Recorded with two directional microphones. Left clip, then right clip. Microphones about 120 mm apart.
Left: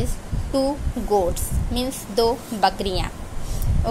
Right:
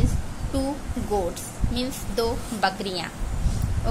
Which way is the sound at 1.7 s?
30° left (ahead or behind).